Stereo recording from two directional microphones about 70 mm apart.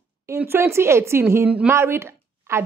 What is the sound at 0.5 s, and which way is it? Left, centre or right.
A woman's voice, right.